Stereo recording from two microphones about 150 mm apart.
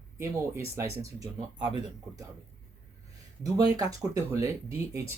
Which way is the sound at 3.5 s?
25° right (ahead or behind).